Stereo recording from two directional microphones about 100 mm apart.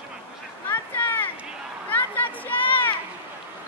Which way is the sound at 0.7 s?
20° left (ahead or behind).